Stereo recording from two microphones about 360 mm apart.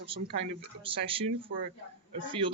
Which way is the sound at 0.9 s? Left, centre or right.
Centre.